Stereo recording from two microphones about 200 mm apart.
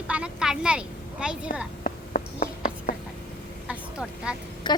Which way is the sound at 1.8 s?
45° left (ahead or behind).